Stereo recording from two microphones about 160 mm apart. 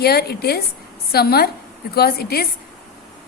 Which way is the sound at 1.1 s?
75° left (ahead or behind).